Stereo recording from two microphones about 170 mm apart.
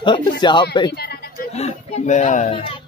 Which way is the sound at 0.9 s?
70° left (ahead or behind).